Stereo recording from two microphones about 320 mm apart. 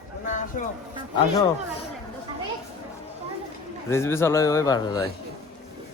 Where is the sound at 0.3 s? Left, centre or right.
Left.